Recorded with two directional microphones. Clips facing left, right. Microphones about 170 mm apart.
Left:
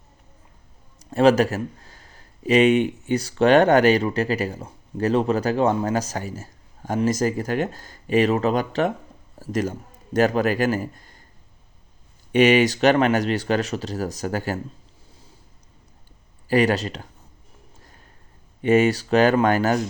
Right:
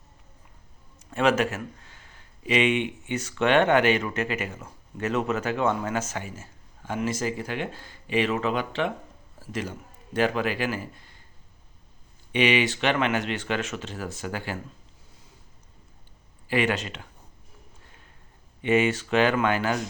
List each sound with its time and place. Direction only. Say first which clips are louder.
0.9 s a man's voice: left 6 dB; 35° left (ahead or behind)
12.3 s speech: left 7 dB; 45° left (ahead or behind)
16.5 s speech: left 6 dB; 40° left (ahead or behind)
17.8 s a sound: left 3 dB; 40° left (ahead or behind)
18.6 s speech: left 5 dB; 40° left (ahead or behind)